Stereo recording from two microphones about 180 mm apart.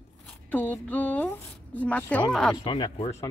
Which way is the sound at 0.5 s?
10° left (ahead or behind).